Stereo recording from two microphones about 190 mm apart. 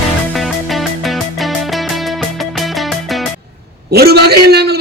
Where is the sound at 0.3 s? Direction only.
Centre (ahead or behind).